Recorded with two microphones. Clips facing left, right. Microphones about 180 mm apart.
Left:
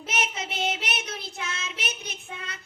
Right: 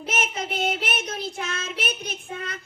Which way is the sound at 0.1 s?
50° right (ahead or behind).